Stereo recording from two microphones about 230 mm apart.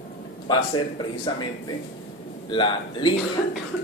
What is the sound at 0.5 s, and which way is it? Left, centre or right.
Speech, centre.